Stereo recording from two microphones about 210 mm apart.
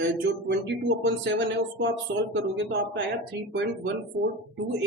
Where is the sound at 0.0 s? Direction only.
60° right (ahead or behind).